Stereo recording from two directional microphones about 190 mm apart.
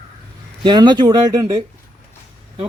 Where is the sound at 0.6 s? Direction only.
25° right (ahead or behind).